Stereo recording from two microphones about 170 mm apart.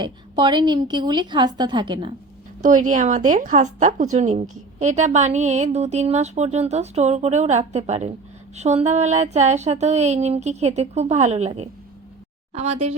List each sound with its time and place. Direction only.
0.0 s a woman's voice: 25° right (ahead or behind)
2.6 s a woman's voice: 50° right (ahead or behind)